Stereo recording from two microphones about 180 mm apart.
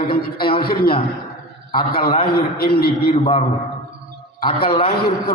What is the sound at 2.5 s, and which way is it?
Speech, 55° left (ahead or behind).